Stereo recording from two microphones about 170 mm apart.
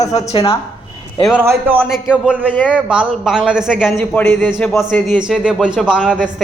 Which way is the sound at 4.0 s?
10° left (ahead or behind).